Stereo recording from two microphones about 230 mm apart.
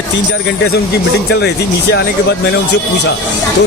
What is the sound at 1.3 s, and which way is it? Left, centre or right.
Speech, left.